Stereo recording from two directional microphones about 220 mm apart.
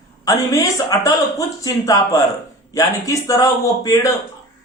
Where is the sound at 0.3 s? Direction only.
15° left (ahead or behind).